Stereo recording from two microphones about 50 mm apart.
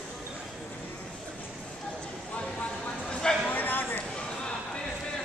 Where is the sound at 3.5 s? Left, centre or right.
Left.